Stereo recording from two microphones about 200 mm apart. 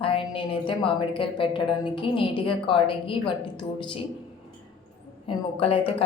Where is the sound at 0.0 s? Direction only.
25° left (ahead or behind).